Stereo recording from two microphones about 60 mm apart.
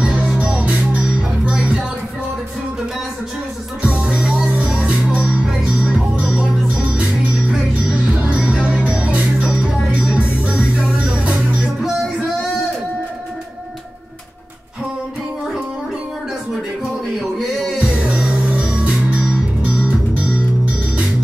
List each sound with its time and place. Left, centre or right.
0.0 s music: centre
3.8 s music: centre
17.2 s a sound: centre
17.7 s music: centre